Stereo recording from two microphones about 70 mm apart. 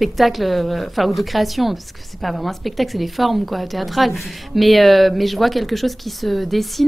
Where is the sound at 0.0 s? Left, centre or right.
Centre.